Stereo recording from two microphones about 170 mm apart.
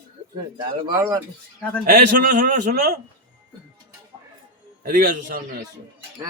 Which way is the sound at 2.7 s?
70° right (ahead or behind).